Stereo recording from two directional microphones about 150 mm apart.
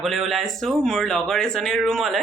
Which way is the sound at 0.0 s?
Centre (ahead or behind).